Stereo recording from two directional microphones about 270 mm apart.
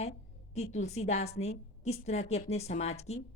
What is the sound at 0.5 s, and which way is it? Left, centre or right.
Speech, left.